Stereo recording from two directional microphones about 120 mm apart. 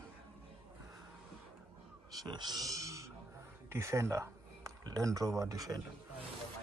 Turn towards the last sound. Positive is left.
turn(degrees=-30)  # may be behind; listen again after turning